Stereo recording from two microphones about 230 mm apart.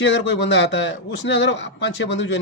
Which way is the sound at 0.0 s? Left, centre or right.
Left.